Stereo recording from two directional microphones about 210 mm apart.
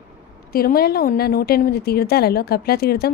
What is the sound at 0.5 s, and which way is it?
A woman's voice, 45° left (ahead or behind).